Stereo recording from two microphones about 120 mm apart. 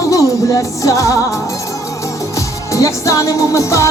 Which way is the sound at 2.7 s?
25° left (ahead or behind).